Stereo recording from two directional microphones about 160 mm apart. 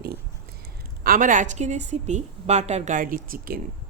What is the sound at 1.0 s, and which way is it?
A woman's voice, 60° right (ahead or behind).